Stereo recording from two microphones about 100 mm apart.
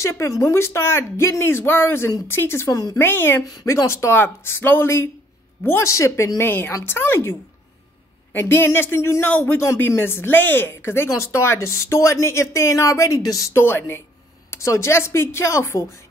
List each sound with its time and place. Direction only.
0.0 s speech: 30° left (ahead or behind)
2.7 s speech: 35° left (ahead or behind)
3.0 s speech: 20° left (ahead or behind)
3.4 s speech: 35° left (ahead or behind)